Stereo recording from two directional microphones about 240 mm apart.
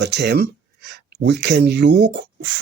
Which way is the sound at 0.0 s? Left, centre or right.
Right.